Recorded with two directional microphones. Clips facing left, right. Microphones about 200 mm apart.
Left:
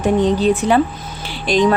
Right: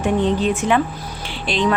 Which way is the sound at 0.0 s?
40° left (ahead or behind).